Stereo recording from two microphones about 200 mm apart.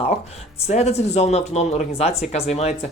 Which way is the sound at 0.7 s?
35° left (ahead or behind).